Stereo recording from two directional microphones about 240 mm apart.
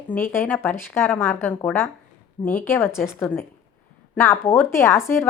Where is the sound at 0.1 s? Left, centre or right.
Centre.